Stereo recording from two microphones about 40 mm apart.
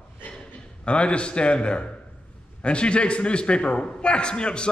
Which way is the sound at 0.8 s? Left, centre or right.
Left.